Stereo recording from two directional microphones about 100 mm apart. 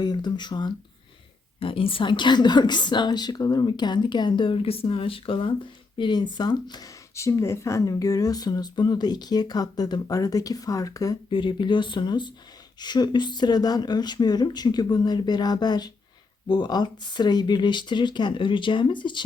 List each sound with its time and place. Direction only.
0.0 s a woman's voice: 45° left (ahead or behind)
1.5 s a woman's voice: 65° left (ahead or behind)
6.0 s a woman's voice: 50° left (ahead or behind)
7.2 s speech: 30° left (ahead or behind)
11.3 s a woman's voice: 55° left (ahead or behind)